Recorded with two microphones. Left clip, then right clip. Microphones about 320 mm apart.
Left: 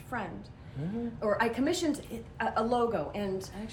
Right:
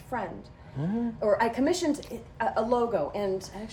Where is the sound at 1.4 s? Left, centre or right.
Centre.